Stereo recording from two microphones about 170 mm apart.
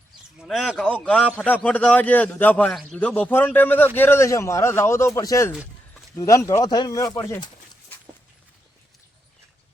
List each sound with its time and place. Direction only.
0.3 s a man's voice: centre (ahead or behind); by 7.9 s 20° left (ahead or behind)